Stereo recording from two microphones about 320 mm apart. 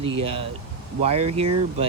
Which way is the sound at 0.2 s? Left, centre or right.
Centre.